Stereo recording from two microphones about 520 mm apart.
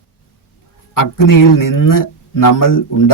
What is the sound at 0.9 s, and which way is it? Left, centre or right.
Speech, left.